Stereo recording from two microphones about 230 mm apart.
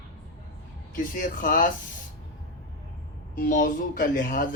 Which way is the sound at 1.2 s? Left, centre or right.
Left.